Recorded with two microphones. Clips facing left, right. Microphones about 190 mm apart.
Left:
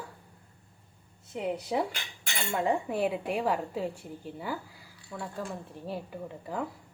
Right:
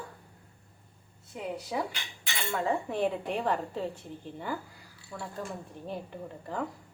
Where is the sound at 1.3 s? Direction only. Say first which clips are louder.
Left 4 dB; 25° left (ahead or behind); by 6.6 s 5° left (ahead or behind).